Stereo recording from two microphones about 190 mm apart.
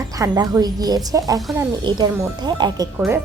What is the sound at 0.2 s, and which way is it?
Speech, 20° right (ahead or behind).